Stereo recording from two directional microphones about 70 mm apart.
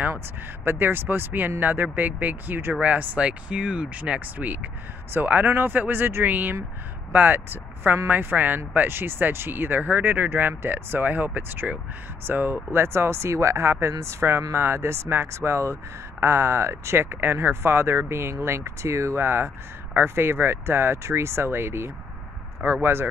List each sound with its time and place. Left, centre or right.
0.7 s speech: right